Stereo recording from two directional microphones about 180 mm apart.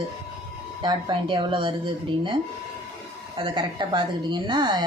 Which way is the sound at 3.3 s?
30° right (ahead or behind).